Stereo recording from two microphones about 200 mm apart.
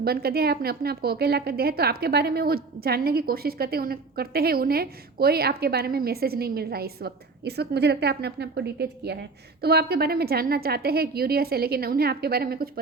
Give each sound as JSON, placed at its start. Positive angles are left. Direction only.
{"t": 0.0, "sound": "a woman's voice", "side_deg": -50}